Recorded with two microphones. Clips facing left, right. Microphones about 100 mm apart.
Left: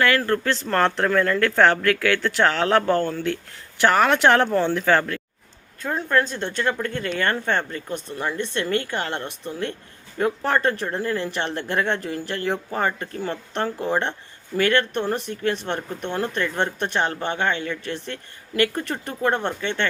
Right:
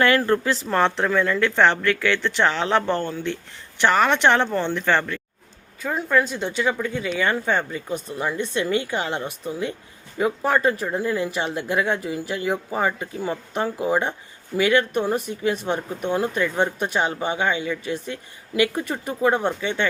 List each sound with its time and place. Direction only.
0.0 s speech: 20° right (ahead or behind)
0.4 s speech: 5° right (ahead or behind)